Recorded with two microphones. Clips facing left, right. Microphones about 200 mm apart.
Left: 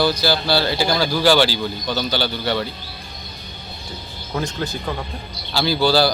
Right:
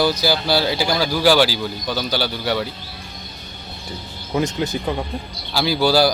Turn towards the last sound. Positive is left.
turn(degrees=-10)  # may be behind; listen again after turning